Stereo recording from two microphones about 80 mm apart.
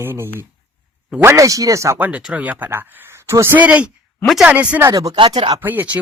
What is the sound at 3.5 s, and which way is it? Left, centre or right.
Speech, centre.